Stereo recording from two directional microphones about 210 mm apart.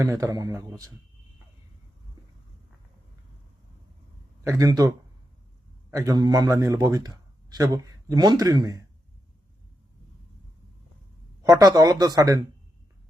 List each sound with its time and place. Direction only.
0.0 s speech: 15° right (ahead or behind)
4.4 s speech: 15° right (ahead or behind)
11.4 s speech: 15° right (ahead or behind)